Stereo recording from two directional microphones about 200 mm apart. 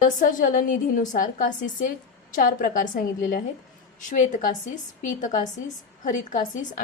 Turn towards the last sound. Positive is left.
turn(degrees=40)  # may be behind; listen again after turning